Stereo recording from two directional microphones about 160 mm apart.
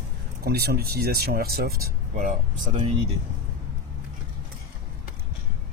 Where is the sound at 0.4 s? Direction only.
75° right (ahead or behind); by 2.7 s 55° right (ahead or behind).